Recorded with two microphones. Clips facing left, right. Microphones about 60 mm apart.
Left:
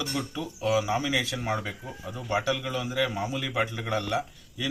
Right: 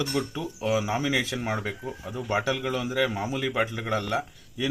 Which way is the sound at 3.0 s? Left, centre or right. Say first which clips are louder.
Right 1 dB; centre.